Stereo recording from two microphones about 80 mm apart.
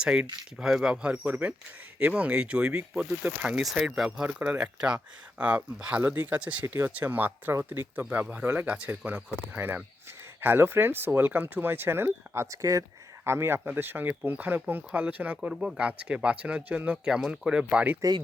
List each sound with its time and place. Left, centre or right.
0.0 s speech: centre
8.2 s speech: centre
15.4 s speech: centre